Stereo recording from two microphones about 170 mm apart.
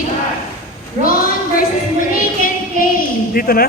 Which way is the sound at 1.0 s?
55° left (ahead or behind).